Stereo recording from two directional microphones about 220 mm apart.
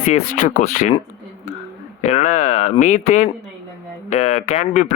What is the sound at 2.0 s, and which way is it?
Speech, 30° left (ahead or behind).